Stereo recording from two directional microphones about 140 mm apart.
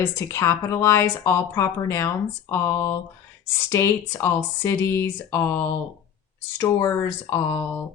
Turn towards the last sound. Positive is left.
turn(degrees=20)  # may be behind; listen again after turning